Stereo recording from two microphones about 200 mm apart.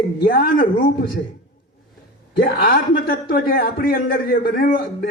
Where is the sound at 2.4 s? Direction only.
45° left (ahead or behind).